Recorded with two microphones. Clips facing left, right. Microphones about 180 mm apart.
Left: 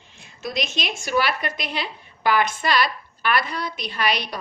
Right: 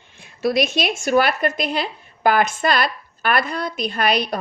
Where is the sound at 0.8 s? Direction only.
55° right (ahead or behind).